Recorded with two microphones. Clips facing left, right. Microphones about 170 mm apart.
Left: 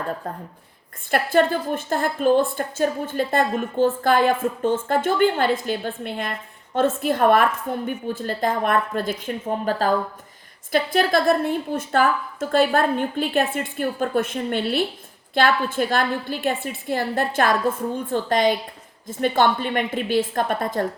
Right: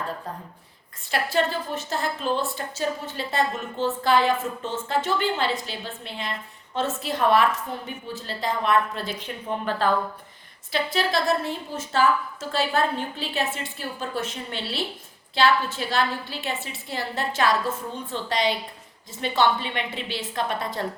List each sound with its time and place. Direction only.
0.3 s a woman's voice: 55° left (ahead or behind)
10.7 s a woman's voice: 50° left (ahead or behind)